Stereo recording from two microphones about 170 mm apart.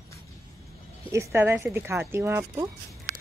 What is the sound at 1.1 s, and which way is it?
Speech, 15° right (ahead or behind).